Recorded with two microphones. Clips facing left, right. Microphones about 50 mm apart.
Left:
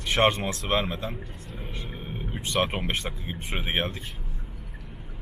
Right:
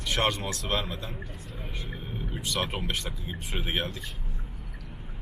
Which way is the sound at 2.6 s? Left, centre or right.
Left.